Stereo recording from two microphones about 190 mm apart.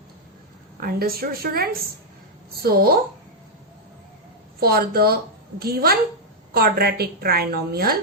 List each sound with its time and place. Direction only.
0.8 s a woman's voice: 50° right (ahead or behind)
4.6 s a woman's voice: 55° right (ahead or behind)